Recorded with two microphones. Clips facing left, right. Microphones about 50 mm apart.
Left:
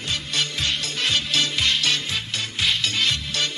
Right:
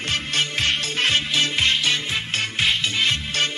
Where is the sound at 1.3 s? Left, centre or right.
Right.